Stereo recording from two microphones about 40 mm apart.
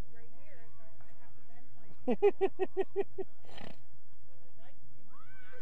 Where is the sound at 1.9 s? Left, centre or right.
Left.